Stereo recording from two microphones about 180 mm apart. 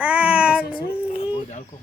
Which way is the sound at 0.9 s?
5° right (ahead or behind).